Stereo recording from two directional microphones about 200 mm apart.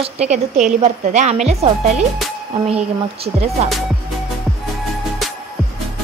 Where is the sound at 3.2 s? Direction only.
30° right (ahead or behind).